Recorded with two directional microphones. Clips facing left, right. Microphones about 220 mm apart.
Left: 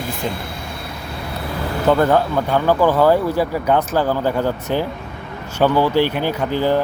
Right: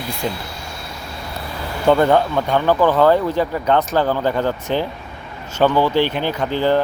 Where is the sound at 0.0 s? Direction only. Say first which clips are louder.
Even; 50° left (ahead or behind).